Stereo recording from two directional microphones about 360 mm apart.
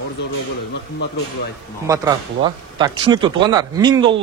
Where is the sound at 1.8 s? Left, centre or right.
Centre.